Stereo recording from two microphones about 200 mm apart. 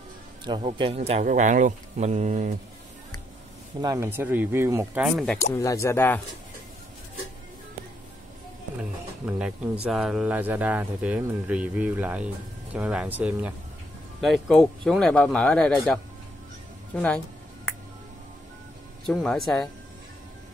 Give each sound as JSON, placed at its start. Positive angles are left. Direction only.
{"t": 0.5, "sound": "speech", "side_deg": -25}
{"t": 3.8, "sound": "speech", "side_deg": -15}
{"t": 5.0, "sound": "speech", "side_deg": 0}
{"t": 5.6, "sound": "speech", "side_deg": 15}
{"t": 9.8, "sound": "speech", "side_deg": -5}
{"t": 19.0, "sound": "speech", "side_deg": 0}